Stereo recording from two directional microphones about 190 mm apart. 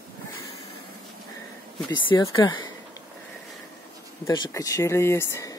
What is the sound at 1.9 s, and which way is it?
Speech, 20° left (ahead or behind).